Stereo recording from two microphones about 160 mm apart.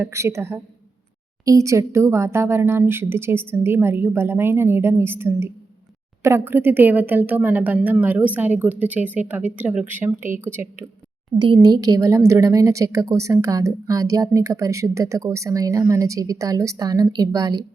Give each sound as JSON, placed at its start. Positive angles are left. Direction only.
{"t": 0.0, "sound": "a woman's voice", "side_deg": -15}
{"t": 11.3, "sound": "speech", "side_deg": -30}